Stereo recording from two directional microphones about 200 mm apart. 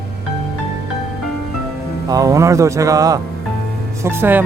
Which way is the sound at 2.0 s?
20° right (ahead or behind).